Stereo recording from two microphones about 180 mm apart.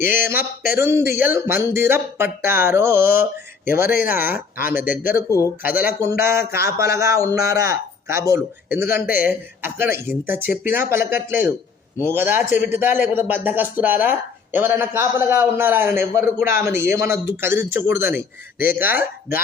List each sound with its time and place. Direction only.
0.1 s speech: 10° right (ahead or behind)